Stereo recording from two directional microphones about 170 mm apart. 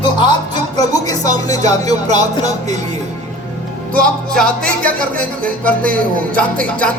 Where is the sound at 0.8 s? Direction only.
20° left (ahead or behind).